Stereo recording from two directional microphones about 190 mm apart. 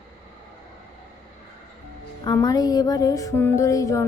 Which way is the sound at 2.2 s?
20° left (ahead or behind).